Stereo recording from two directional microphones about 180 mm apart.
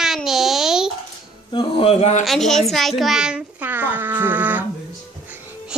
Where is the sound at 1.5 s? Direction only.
30° left (ahead or behind).